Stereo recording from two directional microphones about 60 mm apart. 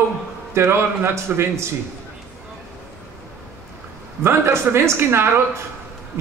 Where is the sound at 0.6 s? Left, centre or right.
Right.